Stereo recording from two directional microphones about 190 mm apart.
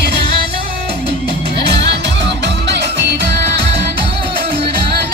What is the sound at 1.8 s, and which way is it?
Music, 65° right (ahead or behind).